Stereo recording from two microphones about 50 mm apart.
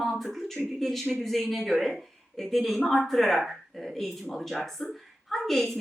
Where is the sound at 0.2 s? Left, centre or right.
Centre.